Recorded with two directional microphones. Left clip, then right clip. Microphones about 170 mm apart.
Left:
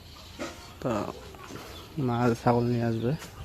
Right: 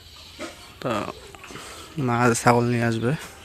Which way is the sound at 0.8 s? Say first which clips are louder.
Right 4 dB; 5° right (ahead or behind).